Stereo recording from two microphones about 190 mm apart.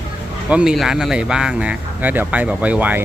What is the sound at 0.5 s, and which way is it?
Speech, 5° right (ahead or behind).